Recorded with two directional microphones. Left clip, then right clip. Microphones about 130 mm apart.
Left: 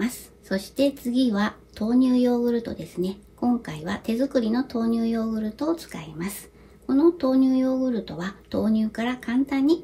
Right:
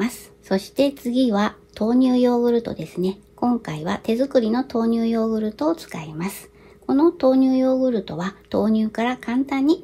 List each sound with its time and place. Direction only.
0.0 s speech: 50° right (ahead or behind)